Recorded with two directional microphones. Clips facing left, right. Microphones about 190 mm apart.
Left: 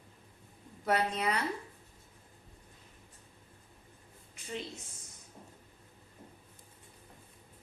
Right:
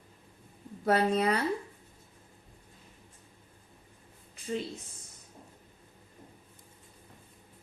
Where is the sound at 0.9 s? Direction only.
35° right (ahead or behind).